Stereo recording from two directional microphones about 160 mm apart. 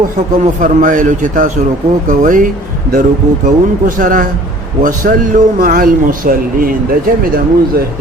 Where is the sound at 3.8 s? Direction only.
60° right (ahead or behind).